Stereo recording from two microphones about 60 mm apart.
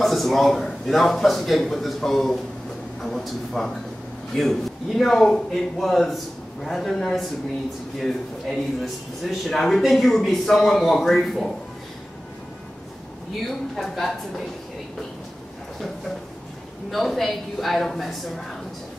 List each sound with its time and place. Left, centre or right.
0.0 s speech: centre
13.7 s speech: centre
16.9 s speech: centre